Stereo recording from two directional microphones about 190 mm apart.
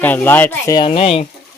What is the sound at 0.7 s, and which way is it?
Speech, 30° left (ahead or behind).